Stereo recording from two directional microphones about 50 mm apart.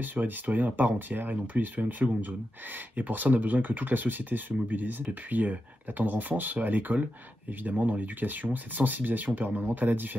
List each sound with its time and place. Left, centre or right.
0.0 s speech: right